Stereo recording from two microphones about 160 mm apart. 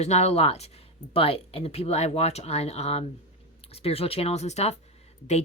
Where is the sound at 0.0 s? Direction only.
45° left (ahead or behind).